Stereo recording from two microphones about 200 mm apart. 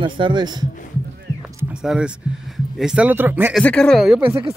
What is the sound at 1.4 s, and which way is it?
Speech, 5° right (ahead or behind).